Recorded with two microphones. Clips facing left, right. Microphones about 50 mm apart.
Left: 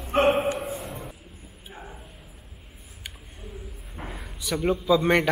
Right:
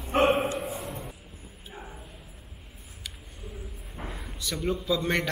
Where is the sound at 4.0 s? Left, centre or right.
Centre.